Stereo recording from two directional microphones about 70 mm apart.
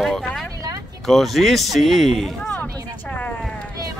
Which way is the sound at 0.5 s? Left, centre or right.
Right.